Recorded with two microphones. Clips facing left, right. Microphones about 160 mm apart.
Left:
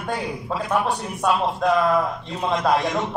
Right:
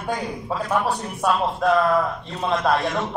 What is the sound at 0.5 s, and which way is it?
A man's voice, 10° left (ahead or behind).